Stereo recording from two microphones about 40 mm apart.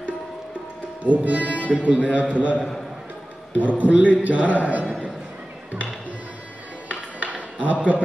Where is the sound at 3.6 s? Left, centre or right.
Right.